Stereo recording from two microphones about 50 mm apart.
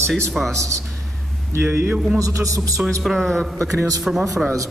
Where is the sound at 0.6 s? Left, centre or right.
Right.